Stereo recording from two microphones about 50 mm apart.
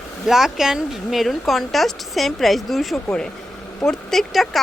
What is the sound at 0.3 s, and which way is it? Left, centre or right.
Speech, centre.